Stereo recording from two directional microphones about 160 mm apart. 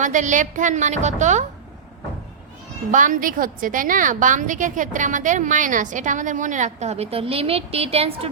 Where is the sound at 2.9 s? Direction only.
55° right (ahead or behind).